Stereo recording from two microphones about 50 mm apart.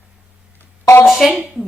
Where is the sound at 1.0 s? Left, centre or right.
Centre.